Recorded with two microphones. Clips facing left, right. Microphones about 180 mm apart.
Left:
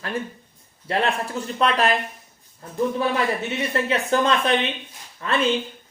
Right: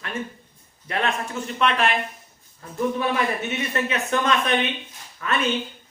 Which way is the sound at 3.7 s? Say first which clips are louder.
Left 4 dB; 30° left (ahead or behind).